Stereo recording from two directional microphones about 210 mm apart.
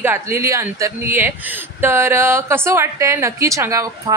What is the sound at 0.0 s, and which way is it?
A woman's voice, 10° right (ahead or behind).